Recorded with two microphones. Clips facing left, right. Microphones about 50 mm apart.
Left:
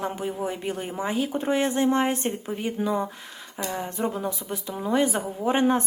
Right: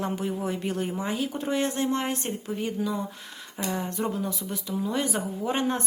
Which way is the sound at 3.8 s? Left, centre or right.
Centre.